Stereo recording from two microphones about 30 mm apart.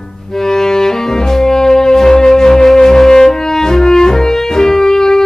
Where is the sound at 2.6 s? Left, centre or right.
Centre.